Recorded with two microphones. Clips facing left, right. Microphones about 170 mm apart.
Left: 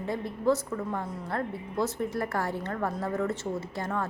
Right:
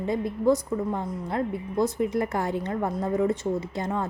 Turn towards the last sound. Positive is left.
turn(degrees=-20)  # may be behind; listen again after turning